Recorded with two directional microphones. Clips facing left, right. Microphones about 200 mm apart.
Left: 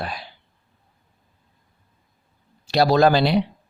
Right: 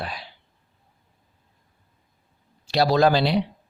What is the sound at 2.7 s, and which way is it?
Speech, 50° left (ahead or behind).